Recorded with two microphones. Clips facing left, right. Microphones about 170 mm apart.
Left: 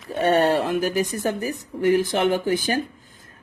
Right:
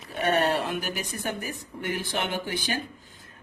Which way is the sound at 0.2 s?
30° left (ahead or behind).